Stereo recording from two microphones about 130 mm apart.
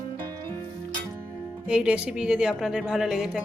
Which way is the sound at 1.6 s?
10° right (ahead or behind).